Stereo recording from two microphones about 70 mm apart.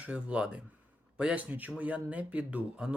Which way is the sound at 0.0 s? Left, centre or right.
Centre.